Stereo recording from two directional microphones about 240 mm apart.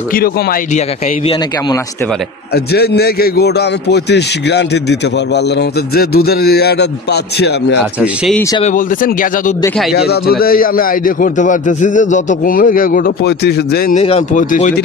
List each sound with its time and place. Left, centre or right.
0.1 s a man's voice: left
2.5 s a man's voice: left
8.4 s speech: centre
8.6 s a man's voice: left
13.9 s a man's voice: left